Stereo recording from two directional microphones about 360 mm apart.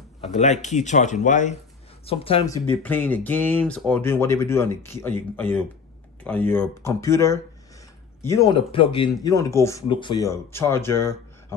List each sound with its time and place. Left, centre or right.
0.2 s speech: centre